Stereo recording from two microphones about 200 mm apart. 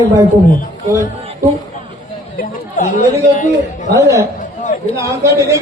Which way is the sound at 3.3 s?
40° left (ahead or behind).